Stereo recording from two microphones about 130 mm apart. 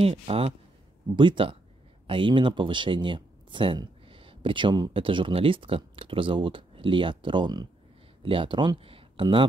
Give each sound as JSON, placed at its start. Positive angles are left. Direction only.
{"t": 0.0, "sound": "speech", "side_deg": -50}